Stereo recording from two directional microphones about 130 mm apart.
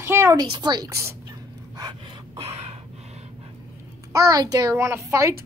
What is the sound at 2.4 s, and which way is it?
Gasp, 50° right (ahead or behind).